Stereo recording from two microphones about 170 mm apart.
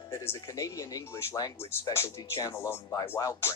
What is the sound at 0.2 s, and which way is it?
Speech, 15° left (ahead or behind).